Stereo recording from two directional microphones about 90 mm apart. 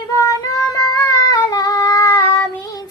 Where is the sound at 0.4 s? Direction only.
45° left (ahead or behind).